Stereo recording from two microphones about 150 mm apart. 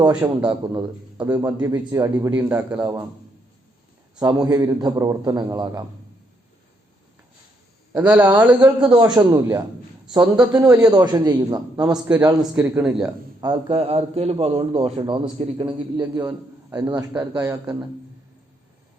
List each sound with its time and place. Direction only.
0.0 s a man's voice: 30° right (ahead or behind)
0.3 s a man's voice: 10° right (ahead or behind)
2.7 s a man's voice: 25° right (ahead or behind)
4.4 s a man's voice: 25° right (ahead or behind)
7.9 s a man's voice: 10° right (ahead or behind)
9.0 s a man's voice: 25° right (ahead or behind)
10.2 s a man's voice: 5° right (ahead or behind)
10.8 s a man's voice: 25° right (ahead or behind)
11.9 s a man's voice: 5° right (ahead or behind)
12.2 s a man's voice: 25° right (ahead or behind)
12.5 s a man's voice: 5° right (ahead or behind)
13.4 s a man's voice: 35° right (ahead or behind)
16.0 s a man's voice: 25° right (ahead or behind)